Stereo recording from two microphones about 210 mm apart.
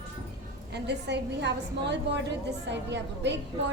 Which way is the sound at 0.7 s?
55° right (ahead or behind).